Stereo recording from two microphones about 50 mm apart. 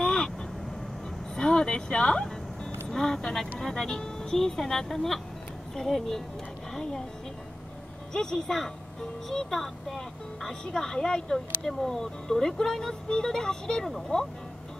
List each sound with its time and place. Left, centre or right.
0.0 s vehicle: centre
1.3 s music: centre
2.9 s a woman's voice: centre
8.1 s speech: centre